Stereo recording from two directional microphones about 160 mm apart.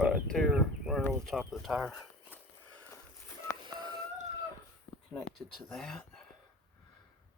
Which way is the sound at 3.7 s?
25° right (ahead or behind).